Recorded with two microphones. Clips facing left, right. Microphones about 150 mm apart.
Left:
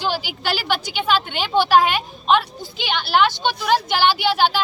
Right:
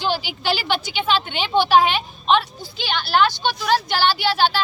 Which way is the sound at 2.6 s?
15° left (ahead or behind).